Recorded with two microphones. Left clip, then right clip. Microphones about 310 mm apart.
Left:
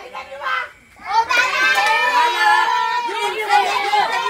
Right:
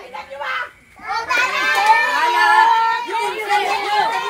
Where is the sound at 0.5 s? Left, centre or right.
Centre.